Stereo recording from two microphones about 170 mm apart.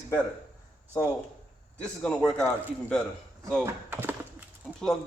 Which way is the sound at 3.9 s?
15° right (ahead or behind).